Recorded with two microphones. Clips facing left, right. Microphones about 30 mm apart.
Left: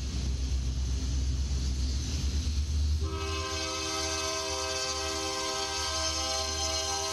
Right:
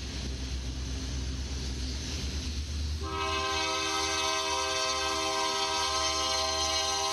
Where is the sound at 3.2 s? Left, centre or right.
Right.